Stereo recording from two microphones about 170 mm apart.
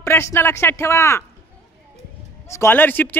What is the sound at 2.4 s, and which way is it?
Speech, 15° left (ahead or behind).